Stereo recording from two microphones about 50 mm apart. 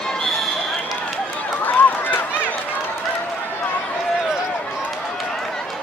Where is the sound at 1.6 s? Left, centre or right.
Left.